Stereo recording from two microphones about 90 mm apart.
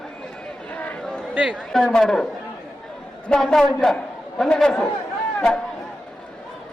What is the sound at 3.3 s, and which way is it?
A man's voice, 5° left (ahead or behind).